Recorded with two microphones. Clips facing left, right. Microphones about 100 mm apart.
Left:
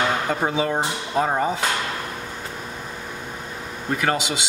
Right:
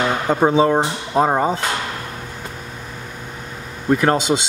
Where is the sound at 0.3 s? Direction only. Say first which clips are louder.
Right 8 dB; 30° right (ahead or behind).